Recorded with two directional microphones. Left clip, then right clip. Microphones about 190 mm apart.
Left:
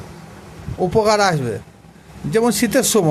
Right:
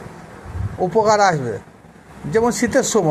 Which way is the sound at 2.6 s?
30° left (ahead or behind).